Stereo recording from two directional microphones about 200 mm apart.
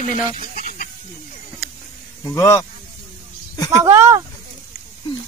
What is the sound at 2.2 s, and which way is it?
Speech, 15° left (ahead or behind).